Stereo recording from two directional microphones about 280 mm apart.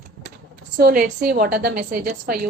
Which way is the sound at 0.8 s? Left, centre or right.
Right.